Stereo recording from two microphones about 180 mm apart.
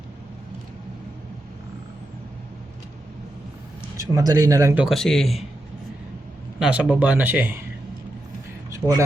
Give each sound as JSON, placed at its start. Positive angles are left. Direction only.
{"t": 4.1, "sound": "speech", "side_deg": -20}
{"t": 6.6, "sound": "speech", "side_deg": -5}
{"t": 8.7, "sound": "a sound", "side_deg": -15}